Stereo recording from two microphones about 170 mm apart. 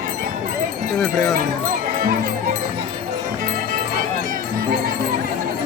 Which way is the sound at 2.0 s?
55° right (ahead or behind).